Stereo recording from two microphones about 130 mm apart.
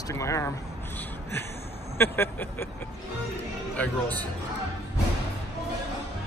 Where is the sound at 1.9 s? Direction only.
15° left (ahead or behind).